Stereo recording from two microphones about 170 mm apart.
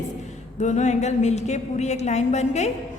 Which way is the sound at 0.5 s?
45° left (ahead or behind).